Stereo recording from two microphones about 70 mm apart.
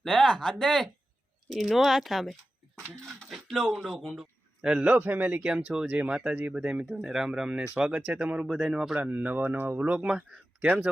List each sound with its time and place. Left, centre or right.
0.0 s speech: centre
4.6 s speech: centre
7.1 s speech: centre
8.4 s speech: centre
9.0 s speech: right